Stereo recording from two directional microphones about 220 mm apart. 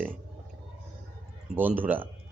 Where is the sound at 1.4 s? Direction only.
10° right (ahead or behind).